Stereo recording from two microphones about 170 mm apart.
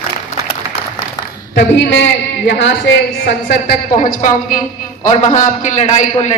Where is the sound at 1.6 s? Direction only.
90° left; by 3.8 s 75° left (ahead or behind).